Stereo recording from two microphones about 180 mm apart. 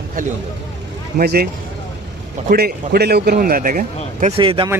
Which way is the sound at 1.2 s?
55° right (ahead or behind).